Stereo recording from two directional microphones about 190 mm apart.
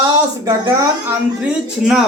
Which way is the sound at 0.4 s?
15° right (ahead or behind).